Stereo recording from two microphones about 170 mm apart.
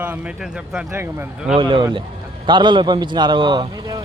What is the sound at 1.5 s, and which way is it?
Speech, 30° right (ahead or behind).